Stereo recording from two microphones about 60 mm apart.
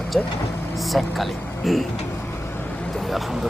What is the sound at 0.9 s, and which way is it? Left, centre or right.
Speech, centre.